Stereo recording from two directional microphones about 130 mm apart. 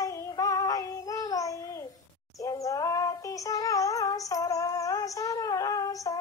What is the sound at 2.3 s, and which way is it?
Synthetic singing, 25° left (ahead or behind).